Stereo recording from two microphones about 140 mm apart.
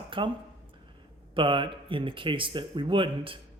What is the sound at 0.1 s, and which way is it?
Speech, 35° right (ahead or behind).